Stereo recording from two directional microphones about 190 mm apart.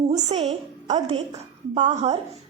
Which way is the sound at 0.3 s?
35° right (ahead or behind).